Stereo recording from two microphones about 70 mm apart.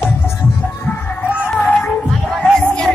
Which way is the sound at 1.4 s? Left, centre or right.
Centre.